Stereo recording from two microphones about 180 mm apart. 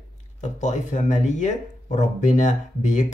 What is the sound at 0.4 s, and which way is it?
Speech, 40° left (ahead or behind).